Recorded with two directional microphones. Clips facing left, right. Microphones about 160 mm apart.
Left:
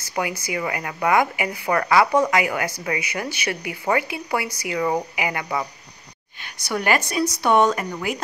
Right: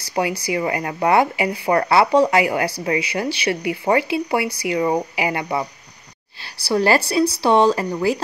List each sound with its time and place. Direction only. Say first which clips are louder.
0.1 s speech: right 5 dB; 30° right (ahead or behind)